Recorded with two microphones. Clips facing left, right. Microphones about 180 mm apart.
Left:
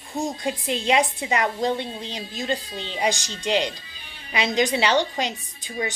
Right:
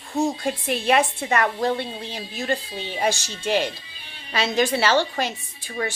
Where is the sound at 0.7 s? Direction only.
15° left (ahead or behind).